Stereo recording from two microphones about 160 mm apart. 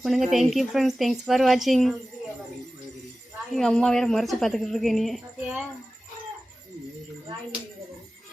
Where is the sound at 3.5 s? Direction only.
5° left (ahead or behind).